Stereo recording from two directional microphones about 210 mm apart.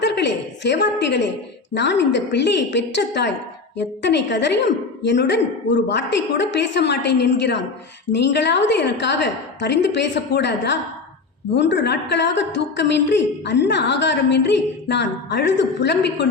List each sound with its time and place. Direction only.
0.0 s a woman's voice: 55° left (ahead or behind)